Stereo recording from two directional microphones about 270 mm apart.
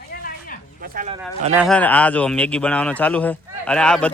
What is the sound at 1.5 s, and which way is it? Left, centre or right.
Speech, centre.